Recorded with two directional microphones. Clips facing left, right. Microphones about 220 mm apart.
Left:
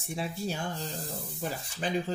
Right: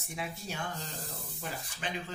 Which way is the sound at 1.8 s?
35° left (ahead or behind).